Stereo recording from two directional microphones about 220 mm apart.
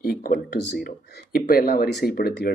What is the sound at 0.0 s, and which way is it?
Speech, 40° left (ahead or behind).